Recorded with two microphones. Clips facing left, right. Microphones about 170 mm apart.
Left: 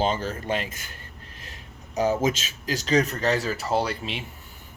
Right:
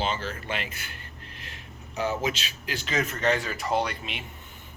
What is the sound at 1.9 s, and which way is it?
Speech, 40° left (ahead or behind).